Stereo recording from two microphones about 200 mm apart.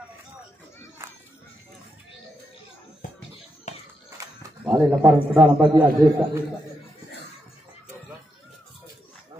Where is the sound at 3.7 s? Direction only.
35° left (ahead or behind).